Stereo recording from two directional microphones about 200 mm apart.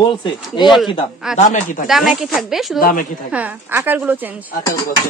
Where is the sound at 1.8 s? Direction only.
Centre (ahead or behind).